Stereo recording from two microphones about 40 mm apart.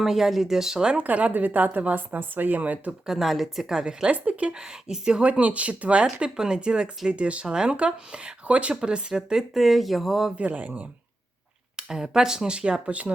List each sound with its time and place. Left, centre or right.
0.0 s speech: centre
0.9 s a woman's voice: right
2.0 s speech: right
3.1 s speech: centre
4.1 s a woman's voice: right
4.5 s speech: centre
5.3 s a woman's voice: right
7.1 s a woman's voice: right
7.4 s speech: centre
8.7 s speech: right
9.3 s speech: centre
10.3 s a woman's voice: right
11.8 s speech: centre
12.5 s speech: right